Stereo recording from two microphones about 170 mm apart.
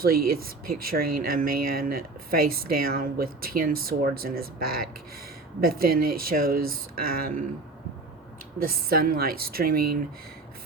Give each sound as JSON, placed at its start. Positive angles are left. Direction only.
{"t": 0.0, "sound": "speech", "side_deg": -60}
{"t": 8.6, "sound": "speech", "side_deg": -60}